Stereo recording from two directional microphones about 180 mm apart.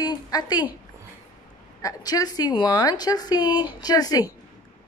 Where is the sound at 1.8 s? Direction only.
20° left (ahead or behind).